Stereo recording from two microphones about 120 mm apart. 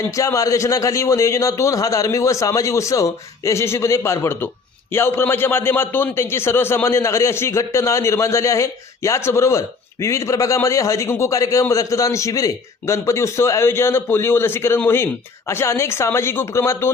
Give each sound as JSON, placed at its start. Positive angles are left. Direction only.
{"t": 0.2, "sound": "a man's voice", "side_deg": 25}